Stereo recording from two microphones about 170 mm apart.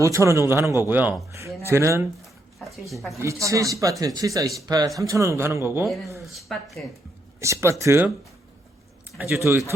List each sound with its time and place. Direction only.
0.0 s a man's voice: 15° right (ahead or behind)
2.9 s speech: centre (ahead or behind)
3.2 s a man's voice: 15° right (ahead or behind)
5.8 s speech: centre (ahead or behind)
7.3 s a man's voice: 15° right (ahead or behind)
9.4 s a man's voice: 15° right (ahead or behind)